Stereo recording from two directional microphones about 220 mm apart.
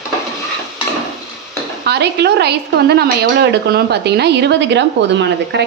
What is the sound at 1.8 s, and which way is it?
A woman's voice, 50° right (ahead or behind).